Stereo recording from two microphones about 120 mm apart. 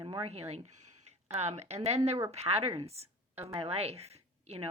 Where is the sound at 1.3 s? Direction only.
65° right (ahead or behind).